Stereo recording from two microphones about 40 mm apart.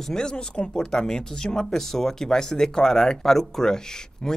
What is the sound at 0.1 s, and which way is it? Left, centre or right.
Speech, centre.